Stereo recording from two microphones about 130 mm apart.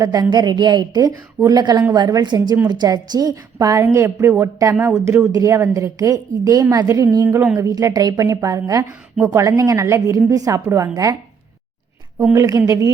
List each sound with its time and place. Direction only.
0.0 s a woman's voice: 30° right (ahead or behind)
7.3 s a sound: 15° right (ahead or behind)
7.7 s speech: 25° right (ahead or behind)
12.3 s speech: 25° right (ahead or behind)